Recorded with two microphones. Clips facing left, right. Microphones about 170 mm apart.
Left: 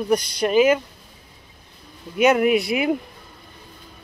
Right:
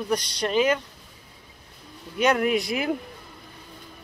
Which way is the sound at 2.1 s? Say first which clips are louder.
Left 5 dB; 10° left (ahead or behind).